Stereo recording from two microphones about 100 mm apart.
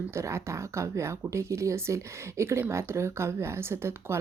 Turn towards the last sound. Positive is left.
turn(degrees=-25)  # may be behind; listen again after turning